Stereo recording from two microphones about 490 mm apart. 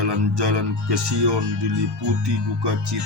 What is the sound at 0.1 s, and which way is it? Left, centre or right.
Speech, right.